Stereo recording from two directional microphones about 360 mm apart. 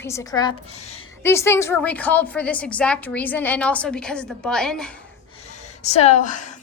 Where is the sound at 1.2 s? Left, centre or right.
Centre.